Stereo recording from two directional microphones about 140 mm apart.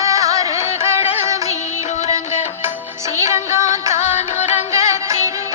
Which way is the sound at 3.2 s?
55° left (ahead or behind).